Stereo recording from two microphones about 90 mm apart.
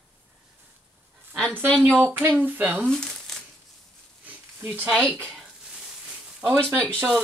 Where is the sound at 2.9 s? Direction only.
5° left (ahead or behind).